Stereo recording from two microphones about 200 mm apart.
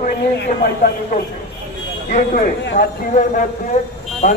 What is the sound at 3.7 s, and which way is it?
Speech, 35° left (ahead or behind).